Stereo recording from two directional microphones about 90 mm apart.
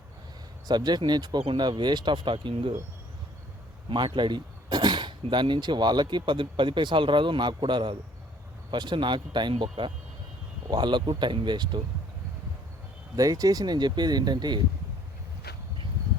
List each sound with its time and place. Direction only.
0.7 s speech: 50° right (ahead or behind); by 2.7 s 70° right (ahead or behind)
3.8 s speech: 65° right (ahead or behind)
10.7 s speech: 55° right (ahead or behind)
13.1 s speech: 45° right (ahead or behind)